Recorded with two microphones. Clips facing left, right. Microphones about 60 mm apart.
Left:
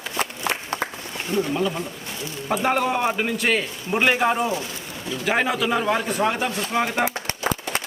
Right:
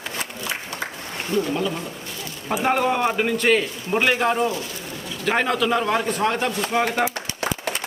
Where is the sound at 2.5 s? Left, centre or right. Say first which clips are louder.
Right 1 dB; centre.